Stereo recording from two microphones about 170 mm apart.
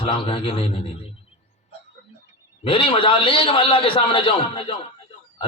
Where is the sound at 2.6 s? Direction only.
30° left (ahead or behind).